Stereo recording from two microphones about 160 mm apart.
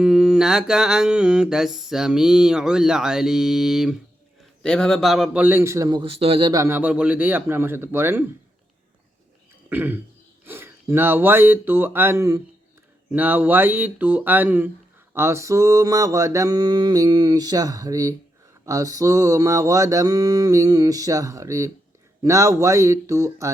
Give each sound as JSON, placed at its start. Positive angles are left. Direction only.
{"t": 0.0, "sound": "mantra", "side_deg": -5}
{"t": 6.0, "sound": "speech", "side_deg": -35}
{"t": 6.5, "sound": "speech", "side_deg": -15}
{"t": 9.6, "sound": "throat clearing", "side_deg": -10}
{"t": 10.4, "sound": "speech", "side_deg": -15}
{"t": 15.1, "sound": "mantra", "side_deg": -15}